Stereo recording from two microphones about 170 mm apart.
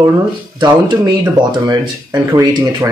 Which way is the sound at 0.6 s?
25° right (ahead or behind).